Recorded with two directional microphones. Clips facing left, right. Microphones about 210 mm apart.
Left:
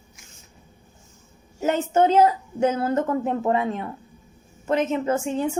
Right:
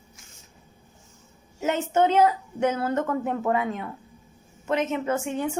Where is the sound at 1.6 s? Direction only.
35° left (ahead or behind).